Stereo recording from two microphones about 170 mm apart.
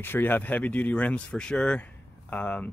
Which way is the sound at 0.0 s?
10° left (ahead or behind).